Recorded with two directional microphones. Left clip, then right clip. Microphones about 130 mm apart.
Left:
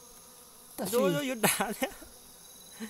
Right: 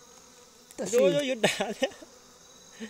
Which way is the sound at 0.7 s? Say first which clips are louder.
Right 5 dB; 50° left (ahead or behind).